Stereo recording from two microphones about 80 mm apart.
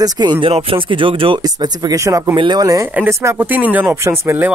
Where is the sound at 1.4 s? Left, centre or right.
Right.